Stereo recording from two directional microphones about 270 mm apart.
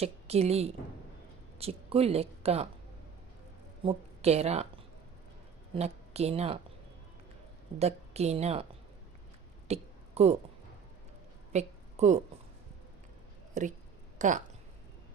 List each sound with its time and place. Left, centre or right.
0.0 s a woman's voice: right
3.8 s a woman's voice: right
5.7 s a woman's voice: right
7.8 s a woman's voice: right
9.6 s a sound: right
11.5 s a sound: right
13.5 s speech: right